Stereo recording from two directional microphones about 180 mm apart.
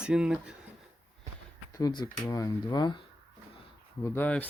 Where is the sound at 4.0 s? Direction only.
10° left (ahead or behind).